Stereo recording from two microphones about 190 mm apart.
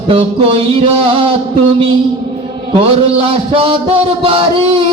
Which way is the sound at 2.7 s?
30° right (ahead or behind).